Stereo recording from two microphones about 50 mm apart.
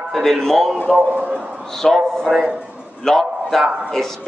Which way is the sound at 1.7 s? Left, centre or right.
Centre.